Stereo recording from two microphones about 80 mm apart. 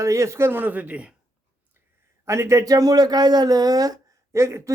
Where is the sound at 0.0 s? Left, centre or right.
Right; by 1.0 s centre.